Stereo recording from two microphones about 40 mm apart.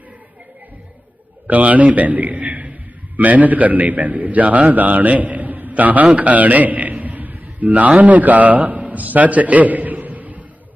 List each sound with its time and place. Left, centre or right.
1.5 s a man's voice: right